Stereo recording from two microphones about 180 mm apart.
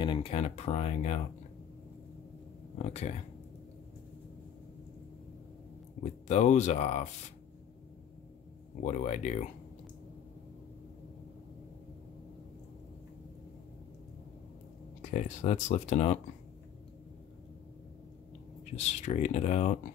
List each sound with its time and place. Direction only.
0.0 s speech: 30° left (ahead or behind)
2.8 s speech: 35° left (ahead or behind)
6.2 s speech: 40° left (ahead or behind)
8.8 s speech: 40° left (ahead or behind)
15.0 s speech: 40° left (ahead or behind)
18.8 s speech: 40° left (ahead or behind)